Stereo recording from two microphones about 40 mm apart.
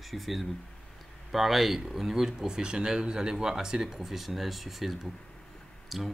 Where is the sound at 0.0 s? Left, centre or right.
Centre.